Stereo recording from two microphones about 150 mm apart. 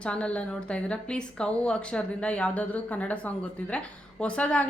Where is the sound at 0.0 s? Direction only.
5° left (ahead or behind).